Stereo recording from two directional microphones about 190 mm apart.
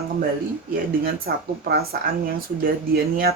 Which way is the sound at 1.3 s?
50° right (ahead or behind).